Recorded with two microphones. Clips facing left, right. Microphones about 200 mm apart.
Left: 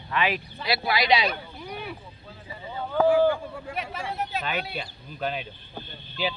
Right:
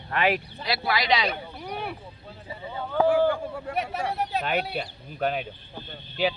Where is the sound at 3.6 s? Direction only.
45° right (ahead or behind).